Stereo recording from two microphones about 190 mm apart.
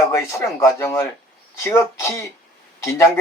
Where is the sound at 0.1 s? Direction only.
15° left (ahead or behind).